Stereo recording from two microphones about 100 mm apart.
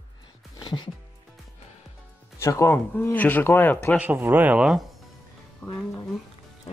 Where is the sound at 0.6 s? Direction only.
45° left (ahead or behind).